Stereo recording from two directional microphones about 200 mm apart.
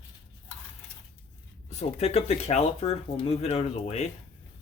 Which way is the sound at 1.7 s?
30° left (ahead or behind).